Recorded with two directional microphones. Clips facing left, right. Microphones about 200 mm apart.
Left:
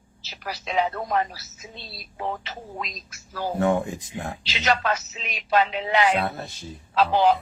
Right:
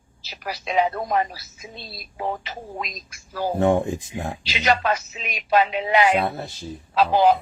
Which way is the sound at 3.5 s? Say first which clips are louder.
Right 3 dB; 25° right (ahead or behind).